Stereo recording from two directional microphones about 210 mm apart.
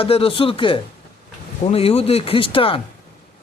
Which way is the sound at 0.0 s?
25° left (ahead or behind).